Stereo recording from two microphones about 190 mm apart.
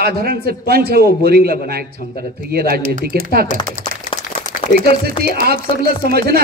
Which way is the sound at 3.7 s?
50° right (ahead or behind).